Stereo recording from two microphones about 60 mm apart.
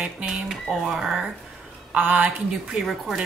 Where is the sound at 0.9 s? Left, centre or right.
Centre.